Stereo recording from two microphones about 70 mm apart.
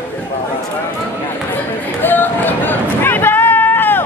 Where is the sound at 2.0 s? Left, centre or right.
Left.